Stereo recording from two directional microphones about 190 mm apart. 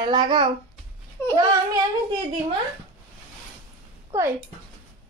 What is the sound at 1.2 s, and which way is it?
Speech, 10° left (ahead or behind).